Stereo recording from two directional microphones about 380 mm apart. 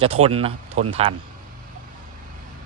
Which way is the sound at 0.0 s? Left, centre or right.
Centre.